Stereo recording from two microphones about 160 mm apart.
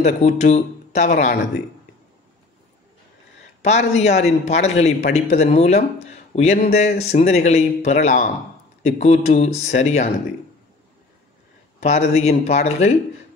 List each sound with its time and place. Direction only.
0.0 s speech: 45° left (ahead or behind)
1.1 s a man's voice: 65° left (ahead or behind)
3.6 s speech: 45° left (ahead or behind)
11.8 s speech: 45° left (ahead or behind)